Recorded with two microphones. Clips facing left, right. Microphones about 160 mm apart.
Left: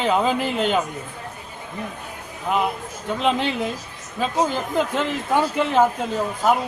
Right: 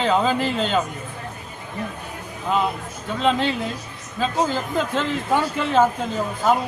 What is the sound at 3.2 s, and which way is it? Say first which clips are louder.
Speech: right 1 dB; 15° left (ahead or behind).